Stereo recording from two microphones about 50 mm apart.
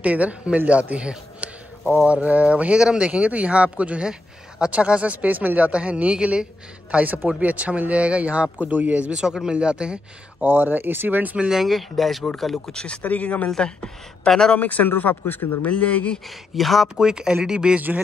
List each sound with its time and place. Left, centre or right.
0.0 s a man's voice: right
5.7 s a man's voice: right
9.2 s speech: centre
10.4 s speech: right
11.5 s speech: centre
12.7 s speech: left
13.6 s speech: centre
14.5 s speech: left
15.6 s speech: left
16.5 s speech: centre
17.0 s speech: centre
17.7 s speech: right